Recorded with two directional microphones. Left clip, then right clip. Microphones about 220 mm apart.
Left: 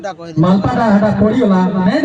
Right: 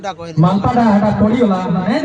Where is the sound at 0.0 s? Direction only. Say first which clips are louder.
Left 2 dB; 30° right (ahead or behind).